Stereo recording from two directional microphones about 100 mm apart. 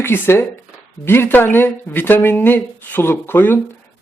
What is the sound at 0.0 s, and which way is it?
Speech, 25° left (ahead or behind).